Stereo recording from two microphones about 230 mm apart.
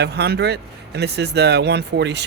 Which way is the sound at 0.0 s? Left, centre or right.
Right.